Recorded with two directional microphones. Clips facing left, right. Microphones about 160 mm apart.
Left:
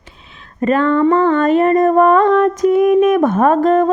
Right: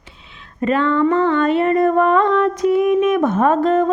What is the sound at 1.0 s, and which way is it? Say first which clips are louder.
Mantra: left 3 dB; 45° left (ahead or behind).